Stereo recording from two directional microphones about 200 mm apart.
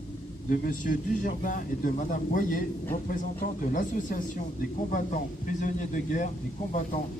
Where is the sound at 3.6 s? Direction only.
40° left (ahead or behind).